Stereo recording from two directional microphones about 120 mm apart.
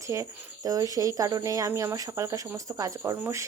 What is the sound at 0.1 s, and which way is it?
Speech, 30° right (ahead or behind).